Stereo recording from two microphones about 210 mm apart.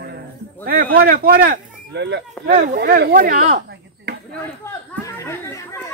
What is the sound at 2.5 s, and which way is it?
Speech, 45° right (ahead or behind).